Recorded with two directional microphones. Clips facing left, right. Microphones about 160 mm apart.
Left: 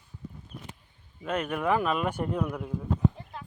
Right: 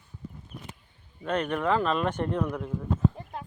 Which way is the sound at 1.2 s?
5° left (ahead or behind).